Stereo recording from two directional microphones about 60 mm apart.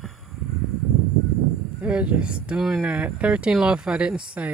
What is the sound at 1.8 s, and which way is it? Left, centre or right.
Speech, right.